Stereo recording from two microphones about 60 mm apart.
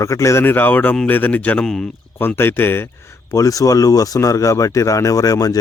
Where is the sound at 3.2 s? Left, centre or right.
Left.